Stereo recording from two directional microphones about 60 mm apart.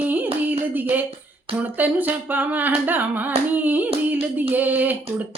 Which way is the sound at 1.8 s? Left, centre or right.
Right.